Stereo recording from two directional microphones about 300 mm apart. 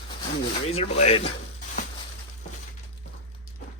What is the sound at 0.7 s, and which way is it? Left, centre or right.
Speech, centre.